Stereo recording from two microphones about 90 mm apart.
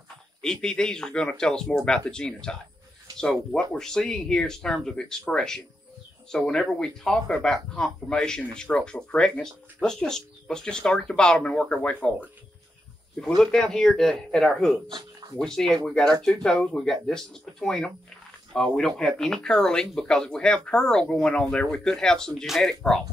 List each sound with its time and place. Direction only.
0.4 s speech: 5° left (ahead or behind)
13.4 s speech: 5° left (ahead or behind)
14.9 s speech: 50° right (ahead or behind)
15.4 s speech: 5° left (ahead or behind)